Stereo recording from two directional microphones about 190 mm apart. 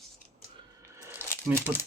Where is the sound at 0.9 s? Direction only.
10° right (ahead or behind).